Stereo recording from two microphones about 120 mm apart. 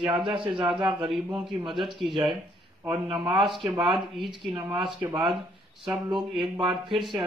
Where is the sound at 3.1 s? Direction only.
45° right (ahead or behind).